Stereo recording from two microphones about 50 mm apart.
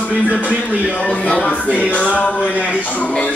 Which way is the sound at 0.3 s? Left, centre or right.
Right.